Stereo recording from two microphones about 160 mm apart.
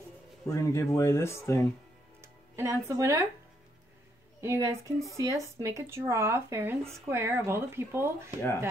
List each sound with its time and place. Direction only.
0.5 s speech: 20° left (ahead or behind)
2.2 s speech: 20° right (ahead or behind)
4.4 s speech: 20° right (ahead or behind)